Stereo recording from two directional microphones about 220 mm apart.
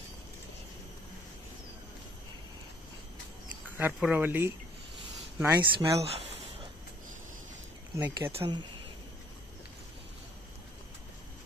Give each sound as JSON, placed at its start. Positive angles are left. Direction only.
{"t": 3.7, "sound": "speech", "side_deg": -10}
{"t": 5.9, "sound": "a sound", "side_deg": -25}
{"t": 7.9, "sound": "speech", "side_deg": -15}